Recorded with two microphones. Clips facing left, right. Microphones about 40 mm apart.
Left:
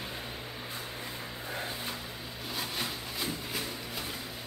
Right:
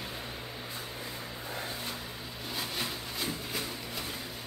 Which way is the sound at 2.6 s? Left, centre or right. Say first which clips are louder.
Even; centre.